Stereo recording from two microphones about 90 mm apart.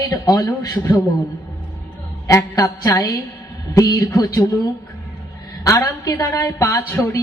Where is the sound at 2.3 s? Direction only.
40° left (ahead or behind).